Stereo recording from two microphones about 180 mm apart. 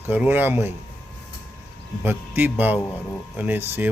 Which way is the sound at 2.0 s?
10° right (ahead or behind).